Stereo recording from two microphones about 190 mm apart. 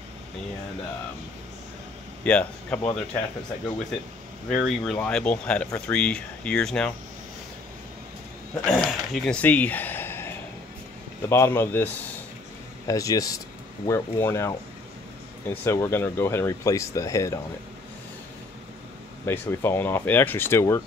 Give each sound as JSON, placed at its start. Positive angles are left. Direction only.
{"t": 2.2, "sound": "speech", "side_deg": 5}
{"t": 4.5, "sound": "speech", "side_deg": 0}
{"t": 8.6, "sound": "speech", "side_deg": 5}
{"t": 15.6, "sound": "speech", "side_deg": 15}
{"t": 19.2, "sound": "speech", "side_deg": 10}